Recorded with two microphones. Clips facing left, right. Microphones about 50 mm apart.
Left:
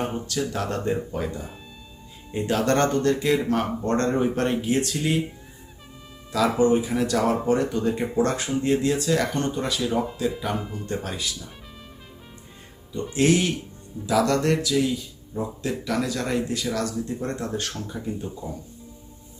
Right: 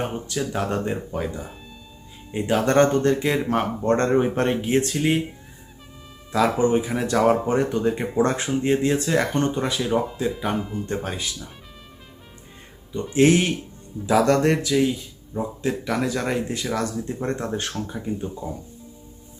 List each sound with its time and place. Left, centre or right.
0.3 s speech: centre
1.1 s speech: centre
2.3 s speech: right
6.3 s speech: right
13.1 s speech: right
17.9 s speech: centre